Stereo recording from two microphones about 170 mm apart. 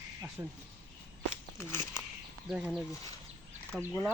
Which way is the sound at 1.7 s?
15° left (ahead or behind).